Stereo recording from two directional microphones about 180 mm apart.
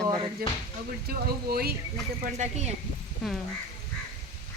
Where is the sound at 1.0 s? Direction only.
60° right (ahead or behind).